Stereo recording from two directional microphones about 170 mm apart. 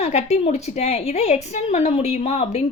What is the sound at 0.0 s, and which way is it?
A woman's voice, 40° left (ahead or behind).